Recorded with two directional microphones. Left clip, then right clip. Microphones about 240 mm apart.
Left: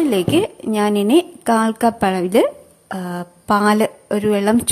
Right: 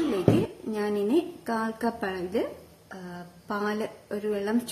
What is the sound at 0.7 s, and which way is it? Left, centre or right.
A woman's voice, left.